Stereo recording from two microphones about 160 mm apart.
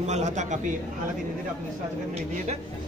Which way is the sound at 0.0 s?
45° right (ahead or behind).